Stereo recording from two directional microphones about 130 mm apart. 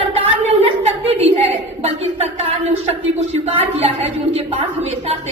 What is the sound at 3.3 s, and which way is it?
A woman's voice, 55° right (ahead or behind).